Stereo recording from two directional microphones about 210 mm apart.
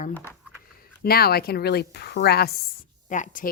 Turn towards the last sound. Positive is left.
turn(degrees=40)  # may be behind; listen again after turning